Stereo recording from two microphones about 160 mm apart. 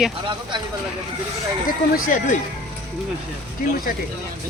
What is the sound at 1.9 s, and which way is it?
Speech, 55° left (ahead or behind).